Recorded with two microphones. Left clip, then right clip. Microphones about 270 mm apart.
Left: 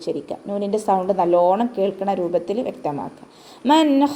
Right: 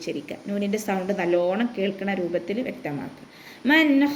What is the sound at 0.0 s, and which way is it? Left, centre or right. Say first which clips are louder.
Speech: left 5 dB; centre.